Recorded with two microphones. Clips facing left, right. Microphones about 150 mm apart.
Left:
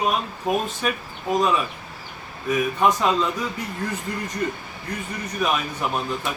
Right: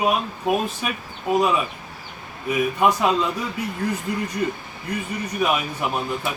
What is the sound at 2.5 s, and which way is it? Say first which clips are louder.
Speech: right 1 dB; 10° right (ahead or behind).